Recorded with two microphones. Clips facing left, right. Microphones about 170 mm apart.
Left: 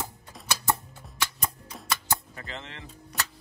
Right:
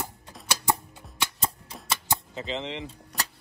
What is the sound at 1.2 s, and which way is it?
Cap gun, 25° right (ahead or behind).